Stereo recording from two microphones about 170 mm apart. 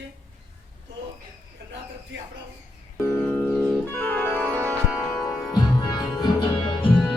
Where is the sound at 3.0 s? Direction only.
10° left (ahead or behind).